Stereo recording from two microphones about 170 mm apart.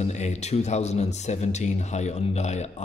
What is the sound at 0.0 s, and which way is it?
Speech, 40° left (ahead or behind).